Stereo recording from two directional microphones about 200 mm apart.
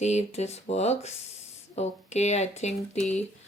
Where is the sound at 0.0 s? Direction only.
35° left (ahead or behind).